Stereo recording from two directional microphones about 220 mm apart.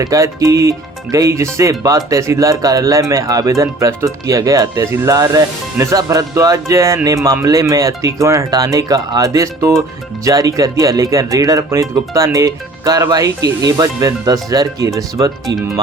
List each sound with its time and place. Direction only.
0.0 s speech: 15° right (ahead or behind)